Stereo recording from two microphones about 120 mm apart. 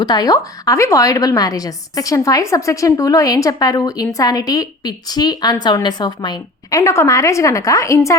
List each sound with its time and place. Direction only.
0.0 s a woman's voice: 35° left (ahead or behind)